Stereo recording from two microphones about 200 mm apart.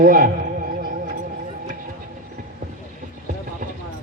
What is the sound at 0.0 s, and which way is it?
Speech, 45° right (ahead or behind).